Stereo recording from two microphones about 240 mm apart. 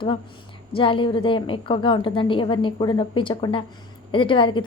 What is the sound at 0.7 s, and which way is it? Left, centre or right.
A woman's voice, left.